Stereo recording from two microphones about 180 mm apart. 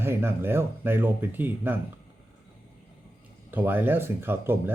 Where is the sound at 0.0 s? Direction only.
15° right (ahead or behind).